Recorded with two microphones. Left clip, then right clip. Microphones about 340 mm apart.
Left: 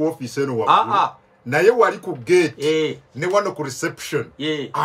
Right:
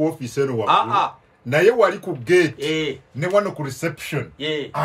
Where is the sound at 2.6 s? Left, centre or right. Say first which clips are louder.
Left 4 dB; left.